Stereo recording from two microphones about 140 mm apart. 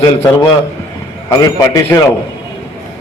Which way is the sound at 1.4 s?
25° left (ahead or behind).